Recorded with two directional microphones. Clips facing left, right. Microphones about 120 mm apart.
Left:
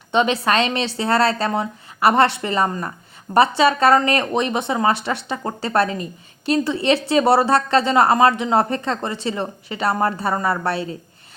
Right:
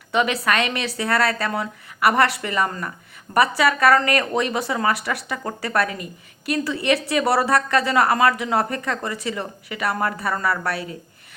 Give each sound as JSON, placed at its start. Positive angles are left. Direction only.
{"t": 0.1, "sound": "a woman's voice", "side_deg": 25}